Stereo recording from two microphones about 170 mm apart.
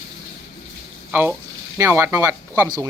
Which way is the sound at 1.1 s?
10° right (ahead or behind).